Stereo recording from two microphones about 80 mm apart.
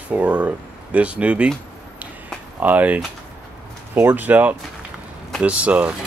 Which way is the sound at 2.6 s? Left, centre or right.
Centre.